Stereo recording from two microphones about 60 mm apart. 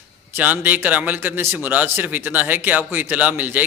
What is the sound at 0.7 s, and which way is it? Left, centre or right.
A man's voice, right.